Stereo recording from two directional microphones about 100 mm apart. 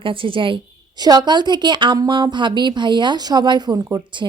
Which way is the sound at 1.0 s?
45° right (ahead or behind).